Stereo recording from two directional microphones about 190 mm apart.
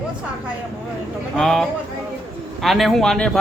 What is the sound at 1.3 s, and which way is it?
Speech, centre (ahead or behind).